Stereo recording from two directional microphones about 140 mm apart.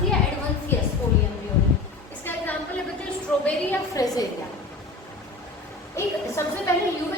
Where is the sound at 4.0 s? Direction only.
25° left (ahead or behind).